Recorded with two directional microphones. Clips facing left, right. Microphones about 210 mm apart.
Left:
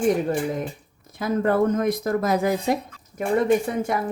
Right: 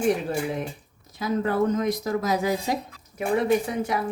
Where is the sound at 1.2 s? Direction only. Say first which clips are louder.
Left 3 dB; 55° left (ahead or behind).